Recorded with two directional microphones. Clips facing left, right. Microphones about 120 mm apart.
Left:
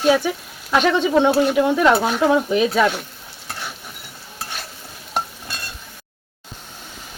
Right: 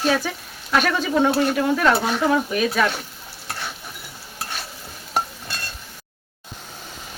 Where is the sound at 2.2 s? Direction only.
20° left (ahead or behind).